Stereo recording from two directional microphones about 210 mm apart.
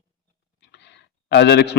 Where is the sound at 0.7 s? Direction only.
55° left (ahead or behind).